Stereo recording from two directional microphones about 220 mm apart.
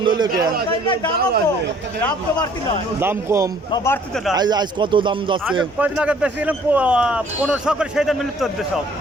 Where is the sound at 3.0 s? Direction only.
10° right (ahead or behind).